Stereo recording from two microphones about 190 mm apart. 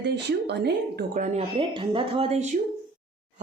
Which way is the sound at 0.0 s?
60° right (ahead or behind).